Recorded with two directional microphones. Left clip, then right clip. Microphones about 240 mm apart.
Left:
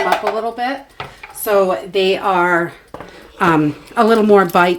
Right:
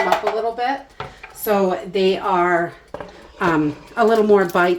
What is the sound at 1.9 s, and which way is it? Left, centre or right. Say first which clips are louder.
Speech: left 3 dB; left.